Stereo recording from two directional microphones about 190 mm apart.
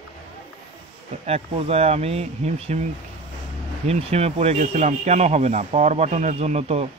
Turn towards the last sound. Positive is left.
turn(degrees=-35)  # may be behind; listen again after turning